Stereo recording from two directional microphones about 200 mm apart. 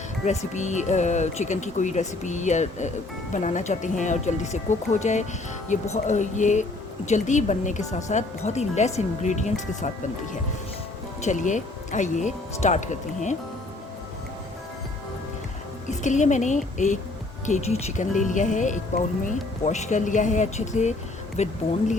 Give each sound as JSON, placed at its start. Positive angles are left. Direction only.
{"t": 0.3, "sound": "speech", "side_deg": 35}
{"t": 11.2, "sound": "speech", "side_deg": 40}
{"t": 15.9, "sound": "speech", "side_deg": 35}